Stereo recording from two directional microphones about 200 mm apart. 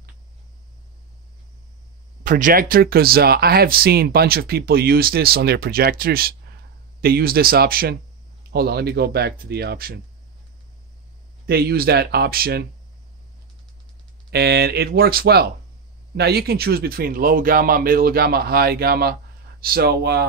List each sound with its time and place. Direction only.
2.2 s speech: 40° right (ahead or behind)
11.4 s speech: 50° right (ahead or behind)
14.3 s speech: 55° right (ahead or behind)